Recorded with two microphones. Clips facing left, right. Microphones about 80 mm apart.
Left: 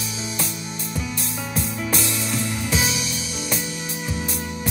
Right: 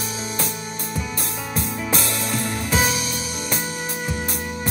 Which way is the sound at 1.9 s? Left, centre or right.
Right.